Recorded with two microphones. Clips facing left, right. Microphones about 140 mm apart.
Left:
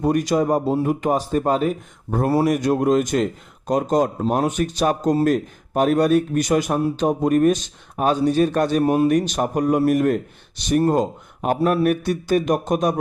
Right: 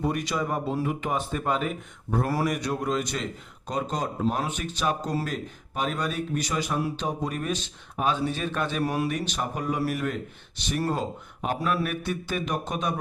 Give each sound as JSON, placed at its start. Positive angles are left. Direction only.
{"t": 0.0, "sound": "speech", "side_deg": 45}
{"t": 8.8, "sound": "speech", "side_deg": 25}
{"t": 9.0, "sound": "speech", "side_deg": 45}